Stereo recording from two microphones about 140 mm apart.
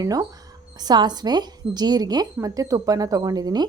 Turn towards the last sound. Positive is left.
turn(degrees=-30)  # may be behind; listen again after turning